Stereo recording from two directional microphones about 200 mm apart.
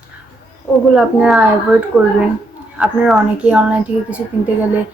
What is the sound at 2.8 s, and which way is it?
Speech, 5° right (ahead or behind).